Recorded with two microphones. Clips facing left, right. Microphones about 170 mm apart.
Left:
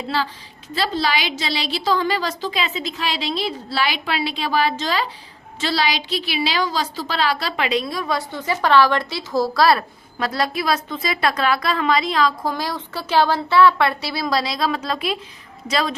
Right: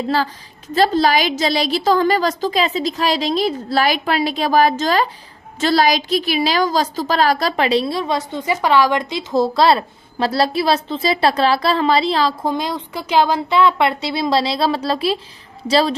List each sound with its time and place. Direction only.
0.7 s a woman's voice: 45° right (ahead or behind)